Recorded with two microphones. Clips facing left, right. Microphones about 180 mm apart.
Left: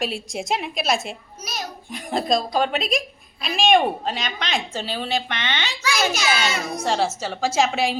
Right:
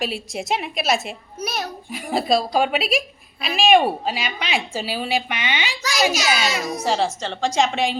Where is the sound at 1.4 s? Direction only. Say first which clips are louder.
Right 7 dB; 60° right (ahead or behind).